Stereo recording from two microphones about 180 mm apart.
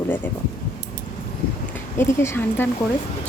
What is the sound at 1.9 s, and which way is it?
Speech, 15° left (ahead or behind).